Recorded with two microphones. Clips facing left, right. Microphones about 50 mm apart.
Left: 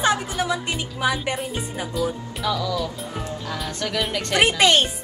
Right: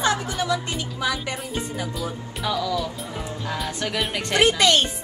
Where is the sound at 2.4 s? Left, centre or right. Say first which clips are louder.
Even; centre.